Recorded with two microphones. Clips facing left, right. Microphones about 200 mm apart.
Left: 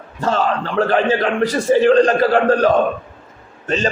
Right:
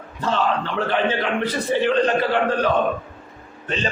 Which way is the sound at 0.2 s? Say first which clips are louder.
Left 3 dB; 40° left (ahead or behind).